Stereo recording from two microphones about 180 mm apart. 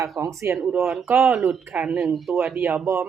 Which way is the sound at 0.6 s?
Centre (ahead or behind).